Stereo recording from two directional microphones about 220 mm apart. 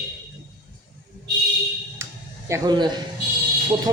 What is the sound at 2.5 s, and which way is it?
Speech, 20° right (ahead or behind).